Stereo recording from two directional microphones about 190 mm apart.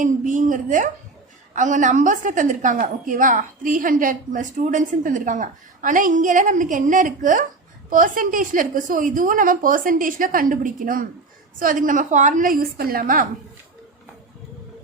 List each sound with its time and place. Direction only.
0.0 s a woman's voice: 40° right (ahead or behind)